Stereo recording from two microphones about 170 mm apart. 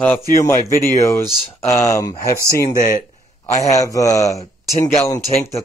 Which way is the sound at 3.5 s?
20° left (ahead or behind).